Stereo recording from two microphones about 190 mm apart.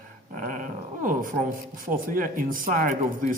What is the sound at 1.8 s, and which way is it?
Speech, 45° right (ahead or behind).